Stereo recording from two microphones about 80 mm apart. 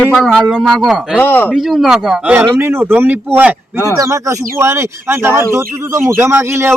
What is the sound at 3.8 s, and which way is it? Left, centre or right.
Speech, right.